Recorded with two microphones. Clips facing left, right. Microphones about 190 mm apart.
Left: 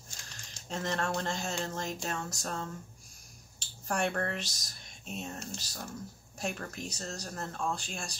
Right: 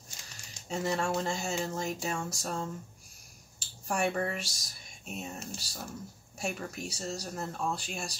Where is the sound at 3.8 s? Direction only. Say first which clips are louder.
Right 1 dB; 5° right (ahead or behind).